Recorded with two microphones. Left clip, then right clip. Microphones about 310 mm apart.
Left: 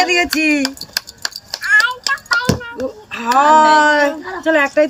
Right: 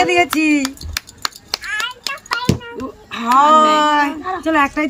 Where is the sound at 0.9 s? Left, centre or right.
Centre.